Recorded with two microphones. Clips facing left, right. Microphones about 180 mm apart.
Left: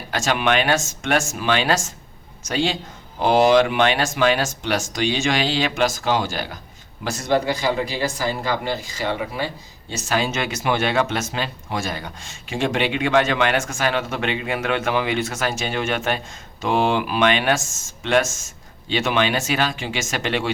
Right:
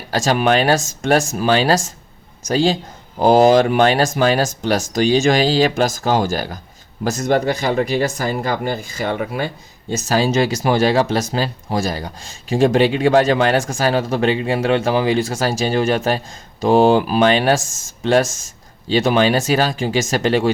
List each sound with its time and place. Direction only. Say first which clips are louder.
0.1 s speech: right 5 dB; 35° right (ahead or behind)
10.1 s speech: right 6 dB; 35° right (ahead or behind)